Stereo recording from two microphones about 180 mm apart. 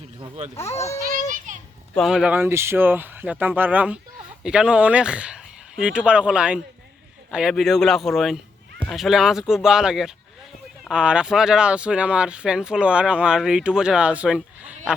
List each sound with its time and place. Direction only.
0.2 s speech: 40° right (ahead or behind)
0.5 s a child's voice: 15° left (ahead or behind)
1.5 s children playing: 45° right (ahead or behind)
2.0 s speech: centre (ahead or behind)